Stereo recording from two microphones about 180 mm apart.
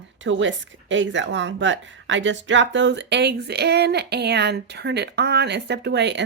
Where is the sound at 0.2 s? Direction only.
90° right.